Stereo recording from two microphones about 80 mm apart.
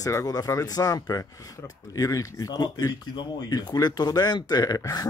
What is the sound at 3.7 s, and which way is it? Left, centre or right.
Speech, left.